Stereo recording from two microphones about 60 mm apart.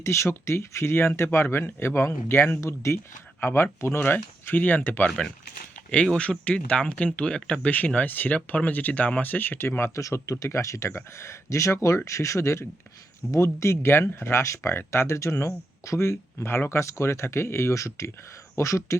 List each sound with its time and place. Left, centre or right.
0.0 s speech: left
2.6 s speech: left
4.0 s speech: left
5.0 s speech: centre; by 10.0 s left
10.0 s speech: left